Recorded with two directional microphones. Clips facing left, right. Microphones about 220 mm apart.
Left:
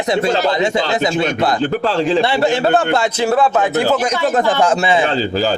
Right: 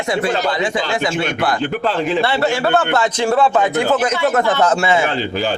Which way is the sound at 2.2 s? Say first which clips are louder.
Left 2 dB; 15° left (ahead or behind).